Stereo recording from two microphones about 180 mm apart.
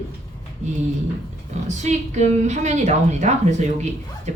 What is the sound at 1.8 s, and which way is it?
A woman's voice, 40° right (ahead or behind).